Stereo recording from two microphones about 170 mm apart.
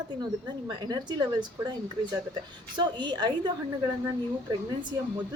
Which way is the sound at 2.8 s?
25° right (ahead or behind).